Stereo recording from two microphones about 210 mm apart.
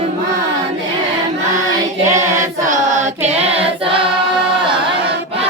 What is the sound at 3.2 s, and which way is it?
Choir, 30° right (ahead or behind).